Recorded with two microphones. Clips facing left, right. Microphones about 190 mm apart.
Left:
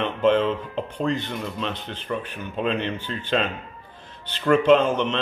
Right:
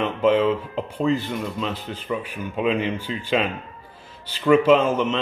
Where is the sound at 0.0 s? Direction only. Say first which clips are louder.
Right 1 dB; 5° right (ahead or behind).